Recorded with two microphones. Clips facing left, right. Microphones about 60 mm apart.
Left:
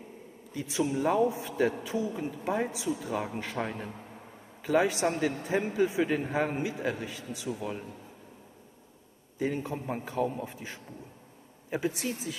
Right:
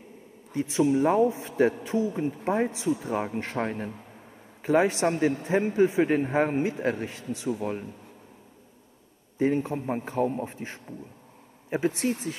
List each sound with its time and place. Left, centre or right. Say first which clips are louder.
0.5 s a man's voice: right 7 dB; right
9.4 s a man's voice: right 6 dB; right